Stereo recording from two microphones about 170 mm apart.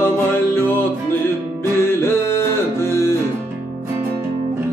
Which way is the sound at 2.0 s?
15° left (ahead or behind).